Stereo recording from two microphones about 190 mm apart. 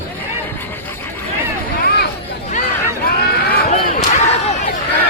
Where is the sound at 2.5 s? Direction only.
40° left (ahead or behind).